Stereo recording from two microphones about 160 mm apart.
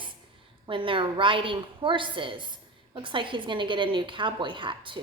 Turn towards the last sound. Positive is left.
turn(degrees=-30)  # may be behind; listen again after turning